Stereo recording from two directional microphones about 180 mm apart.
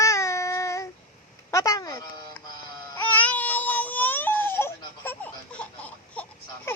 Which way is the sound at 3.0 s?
10° left (ahead or behind).